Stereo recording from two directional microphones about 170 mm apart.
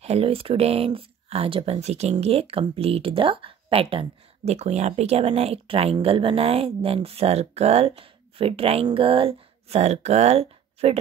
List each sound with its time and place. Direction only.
0.0 s speech: 35° right (ahead or behind)